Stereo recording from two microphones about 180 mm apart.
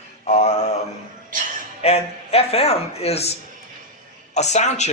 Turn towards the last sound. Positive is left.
turn(degrees=40)  # may be behind; listen again after turning